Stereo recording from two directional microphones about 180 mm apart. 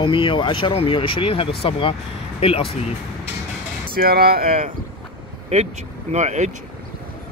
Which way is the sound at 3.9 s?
55° right (ahead or behind).